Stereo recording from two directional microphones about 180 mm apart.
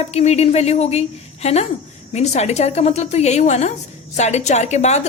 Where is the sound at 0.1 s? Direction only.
35° left (ahead or behind).